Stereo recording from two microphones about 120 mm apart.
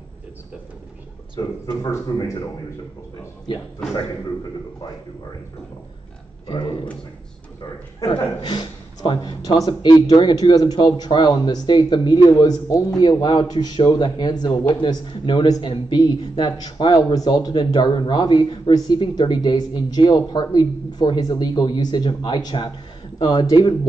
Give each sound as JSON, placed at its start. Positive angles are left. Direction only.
{"t": 1.8, "sound": "speech", "side_deg": 30}
{"t": 3.5, "sound": "speech", "side_deg": 40}
{"t": 6.4, "sound": "speech", "side_deg": 40}
{"t": 8.4, "sound": "speech", "side_deg": 35}